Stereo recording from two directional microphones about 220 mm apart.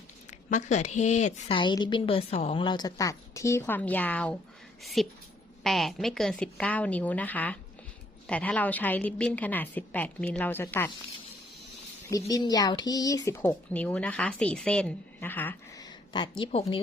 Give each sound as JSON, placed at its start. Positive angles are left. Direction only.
{"t": 0.3, "sound": "a woman's voice", "side_deg": 35}
{"t": 12.3, "sound": "speech", "side_deg": 15}